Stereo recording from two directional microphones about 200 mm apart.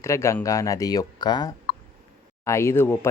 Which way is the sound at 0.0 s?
15° left (ahead or behind).